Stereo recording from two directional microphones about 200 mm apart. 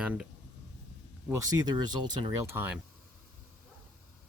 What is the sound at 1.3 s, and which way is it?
Speech, 15° right (ahead or behind).